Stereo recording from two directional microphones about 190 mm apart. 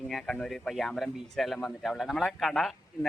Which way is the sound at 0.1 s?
Centre (ahead or behind).